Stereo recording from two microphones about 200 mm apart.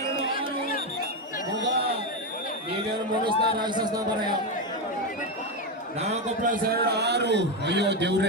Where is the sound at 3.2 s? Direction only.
20° right (ahead or behind).